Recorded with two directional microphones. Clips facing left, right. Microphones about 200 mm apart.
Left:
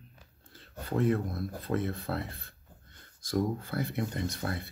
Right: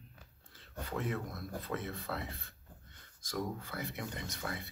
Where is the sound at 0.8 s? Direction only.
35° left (ahead or behind).